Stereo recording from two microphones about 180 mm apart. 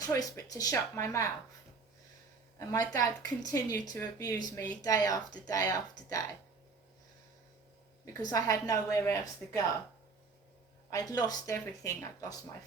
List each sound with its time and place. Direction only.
0.0 s speech: 20° left (ahead or behind)
2.6 s a woman's voice: 20° left (ahead or behind)
8.0 s a woman's voice: 20° left (ahead or behind)
10.8 s a woman's voice: 20° left (ahead or behind)